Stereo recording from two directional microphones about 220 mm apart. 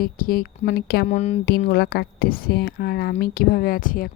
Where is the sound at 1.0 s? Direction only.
30° left (ahead or behind).